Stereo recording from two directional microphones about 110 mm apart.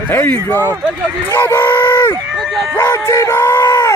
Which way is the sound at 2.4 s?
Centre (ahead or behind).